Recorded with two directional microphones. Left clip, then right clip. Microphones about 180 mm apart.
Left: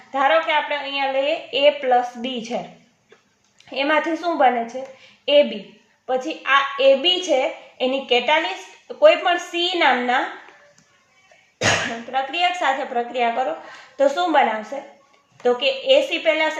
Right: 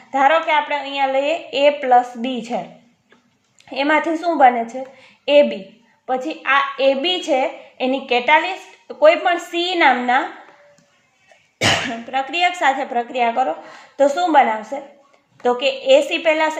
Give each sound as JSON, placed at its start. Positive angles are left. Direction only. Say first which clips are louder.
{"t": 0.1, "sound": "a woman's voice", "louder": "right 3 dB", "side_deg": -25}
{"t": 3.7, "sound": "a woman's voice", "louder": "right 2 dB", "side_deg": -20}
{"t": 12.1, "sound": "a woman's voice", "louder": "right 2 dB", "side_deg": -35}